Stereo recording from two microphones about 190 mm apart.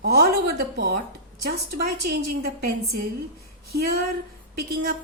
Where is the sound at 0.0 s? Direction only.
55° right (ahead or behind).